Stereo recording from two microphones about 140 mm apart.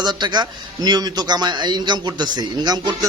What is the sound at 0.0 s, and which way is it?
A man's voice, 30° right (ahead or behind).